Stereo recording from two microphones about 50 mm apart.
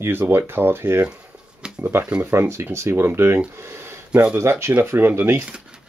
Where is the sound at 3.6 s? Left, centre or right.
Right.